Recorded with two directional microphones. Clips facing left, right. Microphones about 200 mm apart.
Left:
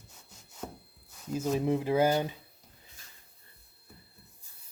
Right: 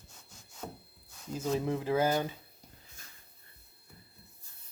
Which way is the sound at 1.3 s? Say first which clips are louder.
Left 3 dB; 15° left (ahead or behind).